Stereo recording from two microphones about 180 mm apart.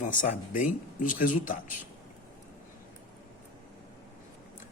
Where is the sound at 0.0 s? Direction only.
45° left (ahead or behind).